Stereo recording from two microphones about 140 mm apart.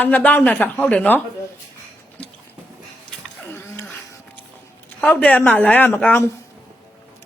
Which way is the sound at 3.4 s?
15° left (ahead or behind).